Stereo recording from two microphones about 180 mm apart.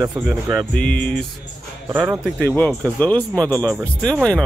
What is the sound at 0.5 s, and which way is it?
Music, 5° left (ahead or behind).